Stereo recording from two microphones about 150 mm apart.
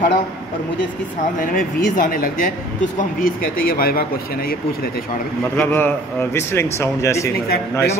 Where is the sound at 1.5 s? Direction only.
65° left (ahead or behind); by 4.9 s 85° left.